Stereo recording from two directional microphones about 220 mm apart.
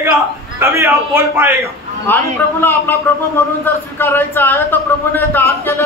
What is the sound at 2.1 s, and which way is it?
Speech, 10° left (ahead or behind).